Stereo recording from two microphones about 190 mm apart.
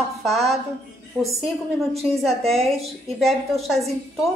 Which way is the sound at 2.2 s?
Centre (ahead or behind).